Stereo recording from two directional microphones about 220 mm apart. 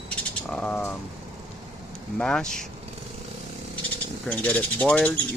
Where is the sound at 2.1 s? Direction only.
5° left (ahead or behind).